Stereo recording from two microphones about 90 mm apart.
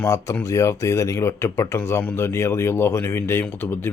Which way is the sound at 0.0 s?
35° left (ahead or behind).